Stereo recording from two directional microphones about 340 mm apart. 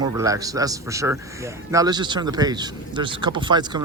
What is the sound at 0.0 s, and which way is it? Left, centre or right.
Speech, centre.